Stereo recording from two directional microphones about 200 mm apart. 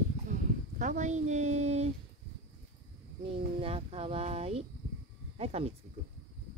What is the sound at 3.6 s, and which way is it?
A woman's voice, 30° right (ahead or behind).